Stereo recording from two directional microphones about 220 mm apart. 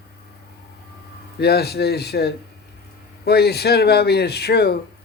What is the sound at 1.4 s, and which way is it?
Speech, 45° left (ahead or behind).